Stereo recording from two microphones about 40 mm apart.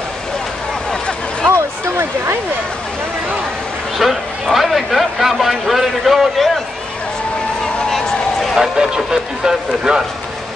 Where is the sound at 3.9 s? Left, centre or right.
Centre.